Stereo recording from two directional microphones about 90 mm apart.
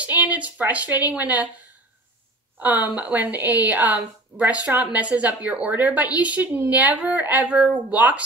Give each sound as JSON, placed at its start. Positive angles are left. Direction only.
{"t": 0.0, "sound": "a woman's voice", "side_deg": -15}
{"t": 2.6, "sound": "a woman's voice", "side_deg": -20}